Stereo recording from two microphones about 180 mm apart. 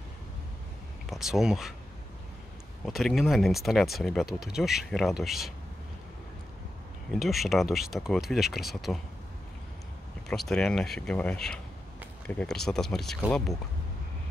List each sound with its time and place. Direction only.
1.0 s speech: centre (ahead or behind)
2.8 s speech: centre (ahead or behind)
7.1 s speech: centre (ahead or behind)
10.2 s speech: centre (ahead or behind)